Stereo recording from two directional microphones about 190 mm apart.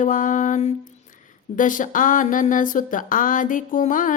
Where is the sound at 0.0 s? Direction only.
40° left (ahead or behind).